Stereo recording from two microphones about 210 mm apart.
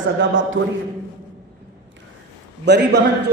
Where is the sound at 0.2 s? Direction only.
60° right (ahead or behind).